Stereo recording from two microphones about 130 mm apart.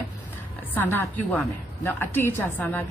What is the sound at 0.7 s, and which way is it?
A woman's voice, 15° left (ahead or behind).